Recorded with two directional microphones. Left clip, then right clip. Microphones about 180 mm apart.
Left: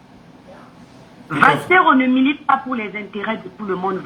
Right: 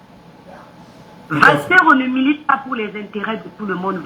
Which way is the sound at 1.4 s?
45° left (ahead or behind).